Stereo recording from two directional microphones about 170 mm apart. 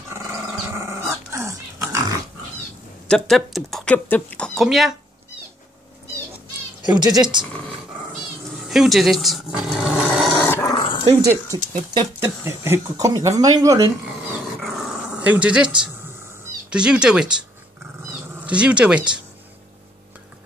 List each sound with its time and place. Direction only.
0.7 s dog: 15° right (ahead or behind)
3.1 s speech: centre (ahead or behind)
6.8 s speech: 25° right (ahead or behind)
8.6 s speech: centre (ahead or behind)
10.4 s dog: 15° left (ahead or behind)
11.1 s speech: 20° right (ahead or behind)
14.6 s dog: centre (ahead or behind)
16.7 s speech: 5° right (ahead or behind)
18.4 s speech: 5° right (ahead or behind)